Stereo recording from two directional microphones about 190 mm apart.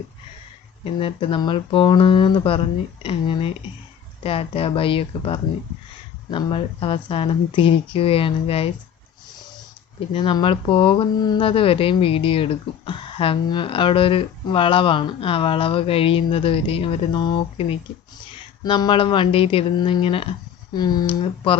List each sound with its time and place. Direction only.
0.9 s speech: 30° left (ahead or behind)
10.1 s speech: 25° left (ahead or behind)